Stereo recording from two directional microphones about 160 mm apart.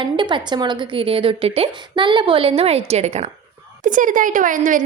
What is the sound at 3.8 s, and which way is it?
A woman's voice, 55° right (ahead or behind).